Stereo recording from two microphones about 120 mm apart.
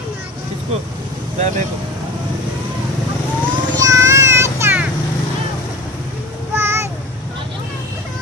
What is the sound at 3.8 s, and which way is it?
Music, 25° right (ahead or behind).